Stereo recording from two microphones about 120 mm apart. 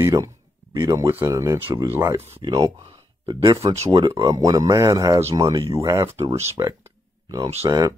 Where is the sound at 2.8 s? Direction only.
35° right (ahead or behind).